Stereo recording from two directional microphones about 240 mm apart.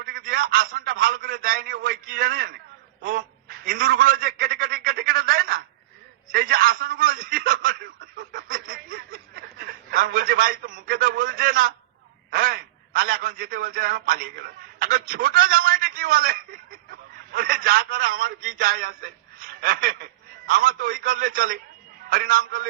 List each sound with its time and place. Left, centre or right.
0.0 s a man's voice: right